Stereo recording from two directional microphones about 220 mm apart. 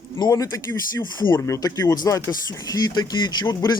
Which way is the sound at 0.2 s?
15° left (ahead or behind).